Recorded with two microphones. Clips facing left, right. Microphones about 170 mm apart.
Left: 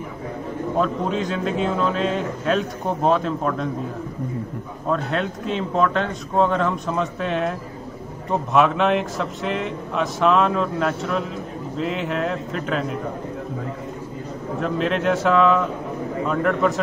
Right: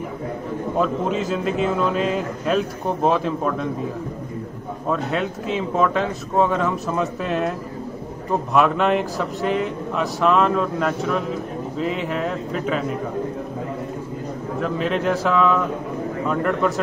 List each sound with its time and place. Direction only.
0.7 s speech: 5° right (ahead or behind)
4.9 s speech: 5° right (ahead or behind)
14.6 s speech: centre (ahead or behind)